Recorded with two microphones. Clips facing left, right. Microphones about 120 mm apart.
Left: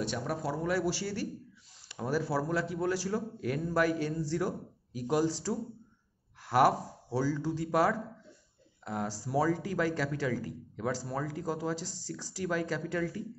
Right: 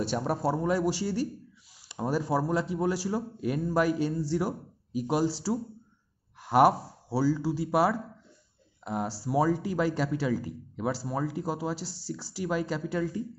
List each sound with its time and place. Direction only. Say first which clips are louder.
0.0 s speech: right 5 dB; 30° right (ahead or behind)
0.7 s a man's voice: right 4 dB; 15° right (ahead or behind)